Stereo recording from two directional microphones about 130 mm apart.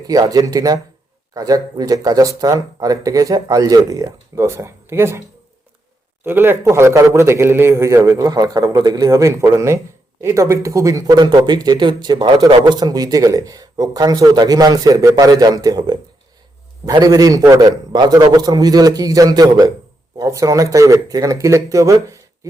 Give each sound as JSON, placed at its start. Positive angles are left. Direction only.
{"t": 0.1, "sound": "a man's voice", "side_deg": -25}
{"t": 6.2, "sound": "a man's voice", "side_deg": -15}